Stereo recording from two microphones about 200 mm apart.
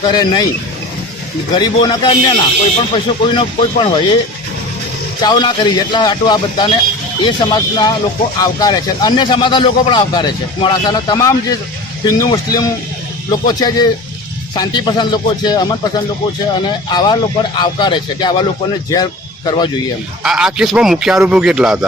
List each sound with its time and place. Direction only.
0.0 s speech: 20° left (ahead or behind)
1.5 s speech: 20° left (ahead or behind)
5.2 s speech: 20° left (ahead or behind)
19.5 s speech: 20° left (ahead or behind)
20.2 s a man's voice: 5° right (ahead or behind)